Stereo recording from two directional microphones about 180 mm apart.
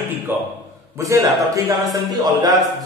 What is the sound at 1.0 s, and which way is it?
Speech, 20° right (ahead or behind).